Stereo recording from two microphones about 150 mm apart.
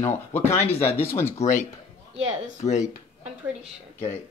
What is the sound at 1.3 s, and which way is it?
Speech, 55° left (ahead or behind).